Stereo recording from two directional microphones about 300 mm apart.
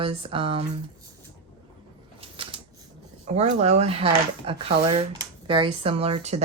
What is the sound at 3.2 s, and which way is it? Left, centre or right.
Speech, right.